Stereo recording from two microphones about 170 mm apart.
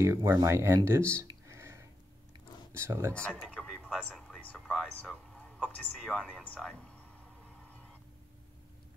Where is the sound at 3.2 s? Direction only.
5° left (ahead or behind).